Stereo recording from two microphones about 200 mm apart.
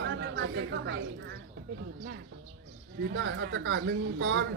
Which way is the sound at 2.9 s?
65° right (ahead or behind).